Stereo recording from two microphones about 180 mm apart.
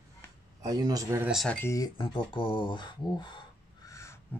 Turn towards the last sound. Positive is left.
turn(degrees=15)  # may be behind; listen again after turning